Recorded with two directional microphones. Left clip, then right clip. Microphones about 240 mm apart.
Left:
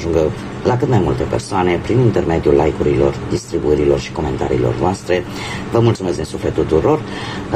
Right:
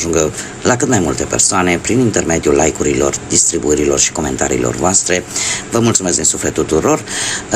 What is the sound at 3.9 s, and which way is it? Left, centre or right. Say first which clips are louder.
Speech: right 3 dB; right.